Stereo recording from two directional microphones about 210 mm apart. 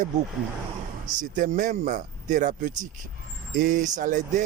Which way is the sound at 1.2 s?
40° right (ahead or behind).